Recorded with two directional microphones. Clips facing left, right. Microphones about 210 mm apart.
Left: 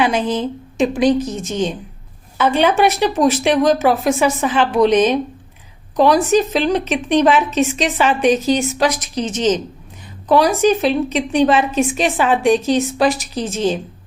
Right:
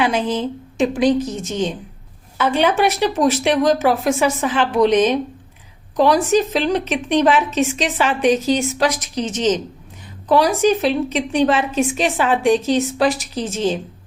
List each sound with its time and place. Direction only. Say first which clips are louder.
0.0 s a woman's voice: left 2 dB; 20° left (ahead or behind)
6.3 s a woman's voice: left 2 dB; 20° left (ahead or behind)